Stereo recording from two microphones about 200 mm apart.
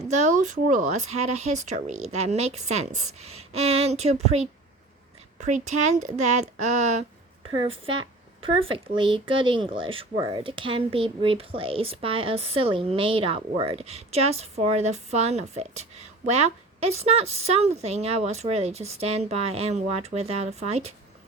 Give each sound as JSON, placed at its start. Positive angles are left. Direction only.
{"t": 0.1, "sound": "speech", "side_deg": -35}
{"t": 7.4, "sound": "speech", "side_deg": -25}